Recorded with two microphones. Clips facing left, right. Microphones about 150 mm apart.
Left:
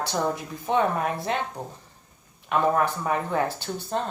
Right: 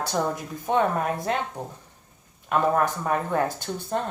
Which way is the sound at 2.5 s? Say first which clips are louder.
Even; 45° right (ahead or behind).